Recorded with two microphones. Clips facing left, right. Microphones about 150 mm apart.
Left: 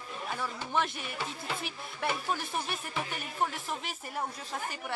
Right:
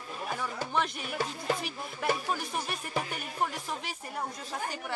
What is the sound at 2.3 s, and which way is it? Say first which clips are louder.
A woman's voice: even; centre (ahead or behind).